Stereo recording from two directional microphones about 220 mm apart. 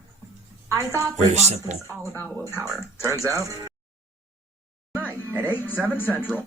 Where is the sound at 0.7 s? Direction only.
15° right (ahead or behind).